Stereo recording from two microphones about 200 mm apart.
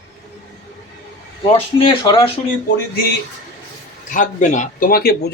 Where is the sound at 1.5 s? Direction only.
30° left (ahead or behind).